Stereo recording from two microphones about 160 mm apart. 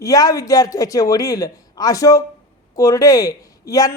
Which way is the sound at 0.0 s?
20° left (ahead or behind).